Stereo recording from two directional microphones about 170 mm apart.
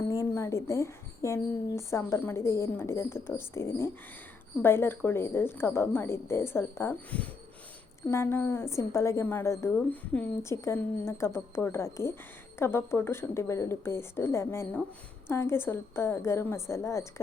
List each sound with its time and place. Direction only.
0.1 s a woman's voice: 20° left (ahead or behind)